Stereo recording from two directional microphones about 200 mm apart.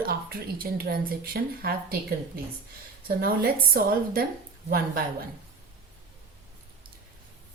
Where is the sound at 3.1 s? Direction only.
50° right (ahead or behind).